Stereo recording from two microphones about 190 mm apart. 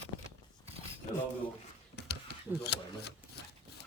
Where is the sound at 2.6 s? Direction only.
60° left (ahead or behind).